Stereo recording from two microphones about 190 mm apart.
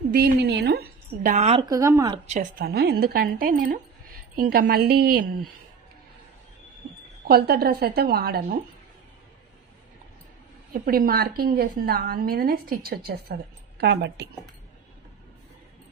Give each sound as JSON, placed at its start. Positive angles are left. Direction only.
{"t": 0.1, "sound": "a woman's voice", "side_deg": -55}
{"t": 1.3, "sound": "a woman's voice", "side_deg": -30}
{"t": 1.7, "sound": "speech", "side_deg": -15}
{"t": 2.6, "sound": "a woman's voice", "side_deg": -55}
{"t": 7.2, "sound": "a woman's voice", "side_deg": -55}
{"t": 10.7, "sound": "a woman's voice", "side_deg": -50}